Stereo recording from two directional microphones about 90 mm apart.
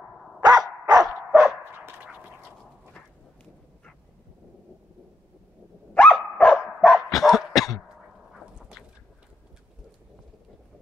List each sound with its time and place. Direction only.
0.4 s dog: 50° right (ahead or behind)
1.0 s dog: 5° right (ahead or behind)
1.6 s dog: 25° right (ahead or behind)
5.9 s dog: 15° left (ahead or behind); by 7.8 s centre (ahead or behind)